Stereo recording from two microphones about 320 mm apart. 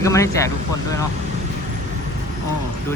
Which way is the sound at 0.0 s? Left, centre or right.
Centre.